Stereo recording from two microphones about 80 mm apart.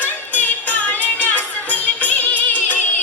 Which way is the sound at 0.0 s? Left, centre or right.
Centre.